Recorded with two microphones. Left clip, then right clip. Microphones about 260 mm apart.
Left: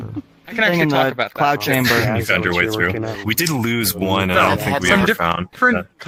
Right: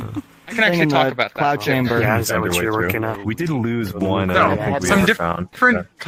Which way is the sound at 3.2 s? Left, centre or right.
Left.